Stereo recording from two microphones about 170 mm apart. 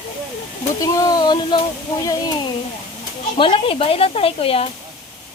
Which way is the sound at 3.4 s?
30° left (ahead or behind).